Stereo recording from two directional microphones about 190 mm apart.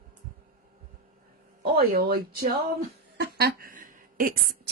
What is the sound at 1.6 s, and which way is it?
Speech, 55° right (ahead or behind).